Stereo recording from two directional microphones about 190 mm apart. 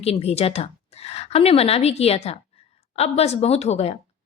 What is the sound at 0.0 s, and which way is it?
A woman's voice, 30° left (ahead or behind).